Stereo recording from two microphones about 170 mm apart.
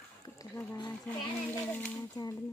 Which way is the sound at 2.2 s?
25° left (ahead or behind).